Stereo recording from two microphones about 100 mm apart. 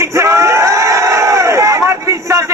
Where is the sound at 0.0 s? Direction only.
30° right (ahead or behind).